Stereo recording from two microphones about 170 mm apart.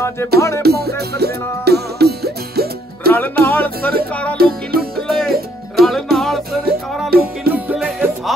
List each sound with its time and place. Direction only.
0.2 s music: 15° left (ahead or behind)
0.6 s music: 70° right (ahead or behind)
3.1 s music: 10° left (ahead or behind)
4.4 s music: 65° right (ahead or behind)
5.0 s music: centre (ahead or behind)
7.1 s music: 60° right (ahead or behind)
7.5 s music: 10° right (ahead or behind)